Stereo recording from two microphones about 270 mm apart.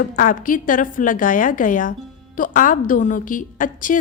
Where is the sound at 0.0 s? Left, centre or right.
Left.